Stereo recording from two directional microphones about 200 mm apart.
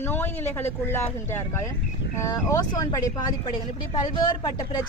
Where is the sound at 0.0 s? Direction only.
10° left (ahead or behind).